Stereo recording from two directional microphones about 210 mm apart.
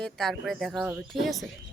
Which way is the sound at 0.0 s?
Centre (ahead or behind).